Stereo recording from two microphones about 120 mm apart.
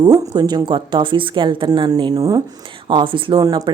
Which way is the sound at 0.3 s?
35° right (ahead or behind).